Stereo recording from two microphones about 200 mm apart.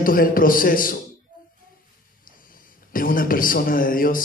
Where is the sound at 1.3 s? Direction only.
45° left (ahead or behind).